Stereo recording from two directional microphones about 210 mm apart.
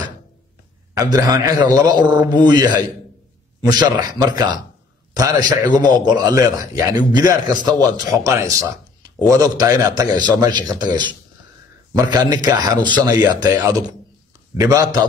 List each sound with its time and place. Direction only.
0.9 s a man's voice: 20° right (ahead or behind)